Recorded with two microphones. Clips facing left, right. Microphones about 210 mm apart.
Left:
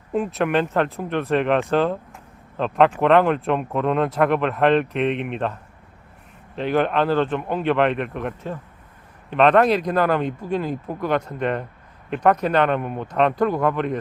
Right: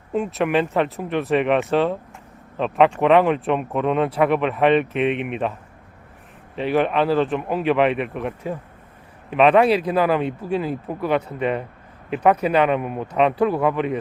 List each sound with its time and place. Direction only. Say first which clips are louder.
0.1 s speech: even; centre (ahead or behind)
6.6 s speech: right 1 dB; 5° right (ahead or behind)